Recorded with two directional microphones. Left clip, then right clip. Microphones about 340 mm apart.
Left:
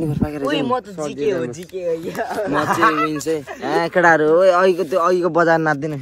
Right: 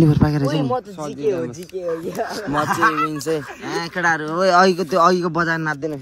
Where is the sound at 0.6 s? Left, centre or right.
Left.